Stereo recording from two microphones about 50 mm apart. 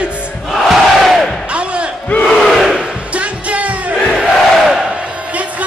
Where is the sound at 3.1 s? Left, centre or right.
Right.